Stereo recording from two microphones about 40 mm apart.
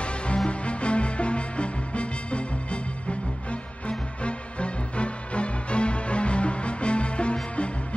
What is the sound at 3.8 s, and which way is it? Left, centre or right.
Music, left.